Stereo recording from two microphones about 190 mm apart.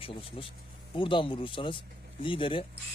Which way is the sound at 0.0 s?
25° left (ahead or behind).